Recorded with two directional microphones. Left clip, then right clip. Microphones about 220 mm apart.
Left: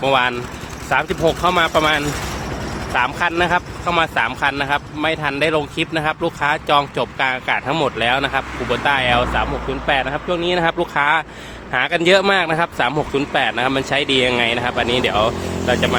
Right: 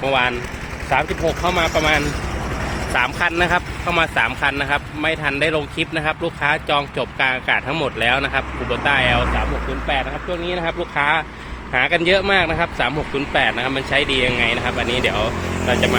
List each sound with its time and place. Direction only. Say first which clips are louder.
0.0 s speech: left 2 dB; 15° left (ahead or behind)
1.0 s speech: left 3 dB; 50° left (ahead or behind)
1.4 s speech: left 2 dB; 25° left (ahead or behind)
2.9 s speech: left 1 dB; centre (ahead or behind)
9.8 s speech: left 4 dB; 25° left (ahead or behind); by 16.0 s 10° left (ahead or behind)